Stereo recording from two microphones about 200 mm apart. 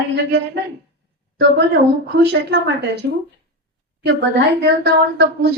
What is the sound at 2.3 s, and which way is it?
Speech, 60° right (ahead or behind).